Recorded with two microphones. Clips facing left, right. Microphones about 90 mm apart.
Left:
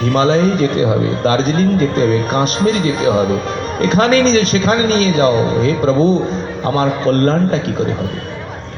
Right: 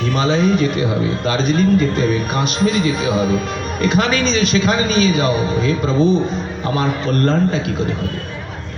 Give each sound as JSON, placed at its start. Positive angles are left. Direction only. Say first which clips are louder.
{"t": 0.1, "sound": "speech", "louder": "left 3 dB", "side_deg": 40}